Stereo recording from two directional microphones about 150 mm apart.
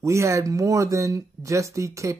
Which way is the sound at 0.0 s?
20° right (ahead or behind).